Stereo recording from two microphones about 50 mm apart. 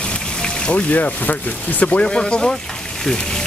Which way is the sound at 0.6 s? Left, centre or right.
Left.